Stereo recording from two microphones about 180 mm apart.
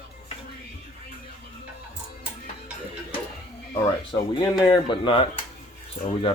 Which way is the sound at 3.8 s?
25° left (ahead or behind).